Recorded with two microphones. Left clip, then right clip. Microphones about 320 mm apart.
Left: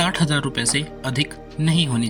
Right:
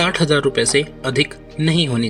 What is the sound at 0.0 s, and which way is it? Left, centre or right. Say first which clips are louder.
Speech: right 6 dB; left.